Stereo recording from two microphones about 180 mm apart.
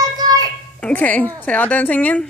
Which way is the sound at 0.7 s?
5° left (ahead or behind).